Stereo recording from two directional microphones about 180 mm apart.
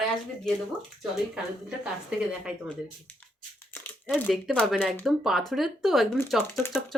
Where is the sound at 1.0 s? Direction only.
5° right (ahead or behind).